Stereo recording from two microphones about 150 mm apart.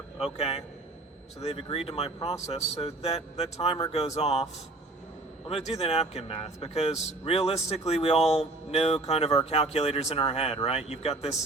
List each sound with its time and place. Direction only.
0.3 s speech: 40° left (ahead or behind)
5.7 s speech: 45° left (ahead or behind)